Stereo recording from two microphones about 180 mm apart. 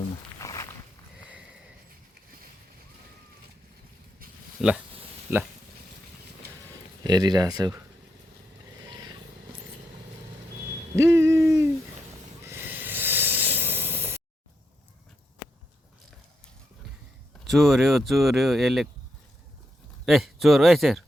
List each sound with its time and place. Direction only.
0.3 s walk: 20° left (ahead or behind)
1.2 s sniff: 5° right (ahead or behind)
4.6 s speech: centre (ahead or behind)
7.0 s speech: 20° right (ahead or behind)
10.9 s a sound: 15° right (ahead or behind)
12.4 s hiss: 15° right (ahead or behind)
17.5 s speech: centre (ahead or behind)
20.1 s speech: centre (ahead or behind)